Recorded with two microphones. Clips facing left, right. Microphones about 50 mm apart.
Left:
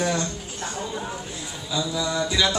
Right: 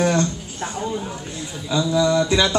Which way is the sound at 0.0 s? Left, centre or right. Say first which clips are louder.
Right 6 dB; right.